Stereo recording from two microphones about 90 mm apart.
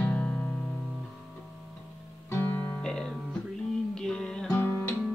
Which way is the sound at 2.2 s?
25° left (ahead or behind).